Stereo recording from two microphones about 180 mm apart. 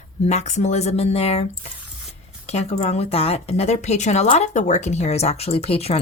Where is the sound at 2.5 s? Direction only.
35° left (ahead or behind).